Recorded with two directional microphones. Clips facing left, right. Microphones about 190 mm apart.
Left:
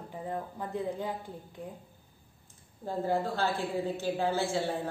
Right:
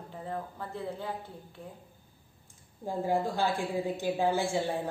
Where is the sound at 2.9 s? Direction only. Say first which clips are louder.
Right 1 dB; 15° right (ahead or behind).